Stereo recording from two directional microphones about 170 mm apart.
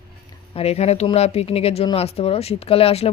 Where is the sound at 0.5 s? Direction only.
40° left (ahead or behind).